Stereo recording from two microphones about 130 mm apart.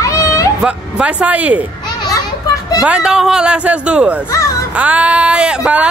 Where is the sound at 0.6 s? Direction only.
10° right (ahead or behind).